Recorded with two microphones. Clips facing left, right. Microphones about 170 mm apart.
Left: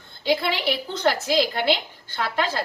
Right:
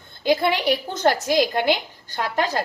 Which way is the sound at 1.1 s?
15° right (ahead or behind).